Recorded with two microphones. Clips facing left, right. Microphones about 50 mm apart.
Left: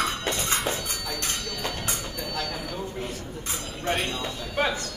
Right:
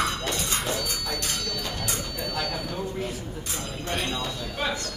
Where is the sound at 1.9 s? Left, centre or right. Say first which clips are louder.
Right 1 dB; centre.